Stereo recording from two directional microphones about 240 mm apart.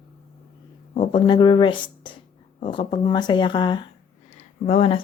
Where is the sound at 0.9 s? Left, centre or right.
Centre.